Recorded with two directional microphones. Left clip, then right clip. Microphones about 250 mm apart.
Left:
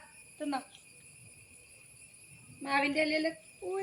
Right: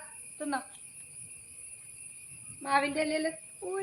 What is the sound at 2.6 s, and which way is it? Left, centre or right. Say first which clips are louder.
Speech: right 1 dB; centre.